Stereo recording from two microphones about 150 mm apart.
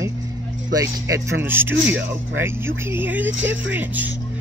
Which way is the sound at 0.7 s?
20° right (ahead or behind).